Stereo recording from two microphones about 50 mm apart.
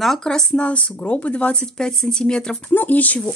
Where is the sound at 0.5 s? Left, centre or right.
Left.